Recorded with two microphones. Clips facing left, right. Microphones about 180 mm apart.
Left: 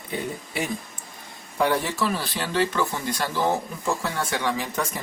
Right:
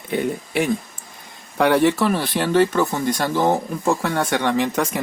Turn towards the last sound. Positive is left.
turn(degrees=-85)